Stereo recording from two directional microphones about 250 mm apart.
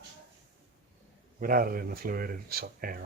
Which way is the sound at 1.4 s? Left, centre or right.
Right.